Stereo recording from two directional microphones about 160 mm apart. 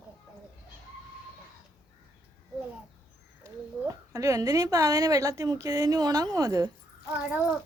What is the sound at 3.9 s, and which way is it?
A woman's voice, 20° right (ahead or behind).